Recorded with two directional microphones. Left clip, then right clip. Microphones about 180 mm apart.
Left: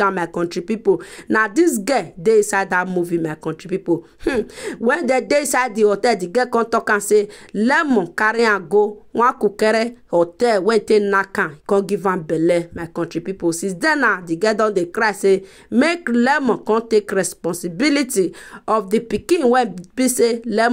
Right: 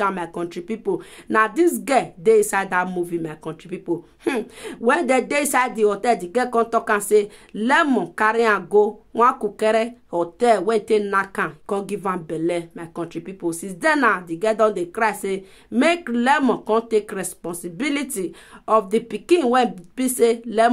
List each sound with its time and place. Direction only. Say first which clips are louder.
0.0 s speech: left 5 dB; 35° left (ahead or behind)